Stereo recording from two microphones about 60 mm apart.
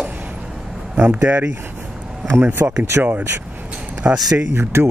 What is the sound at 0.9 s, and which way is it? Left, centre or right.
Speech, right.